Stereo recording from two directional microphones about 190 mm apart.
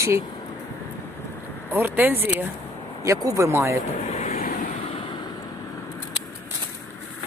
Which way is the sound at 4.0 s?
35° left (ahead or behind).